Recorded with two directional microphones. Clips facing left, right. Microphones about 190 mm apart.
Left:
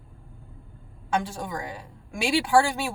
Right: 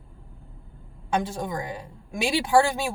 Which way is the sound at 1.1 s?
20° right (ahead or behind).